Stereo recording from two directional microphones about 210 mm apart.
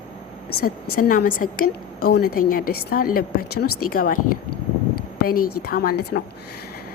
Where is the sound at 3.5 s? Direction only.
90° left.